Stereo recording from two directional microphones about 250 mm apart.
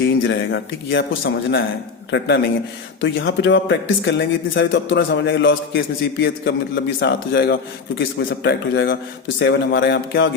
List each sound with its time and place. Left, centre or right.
0.0 s speech: left